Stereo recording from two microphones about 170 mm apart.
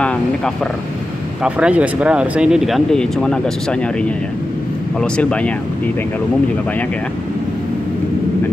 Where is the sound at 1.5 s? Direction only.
5° right (ahead or behind).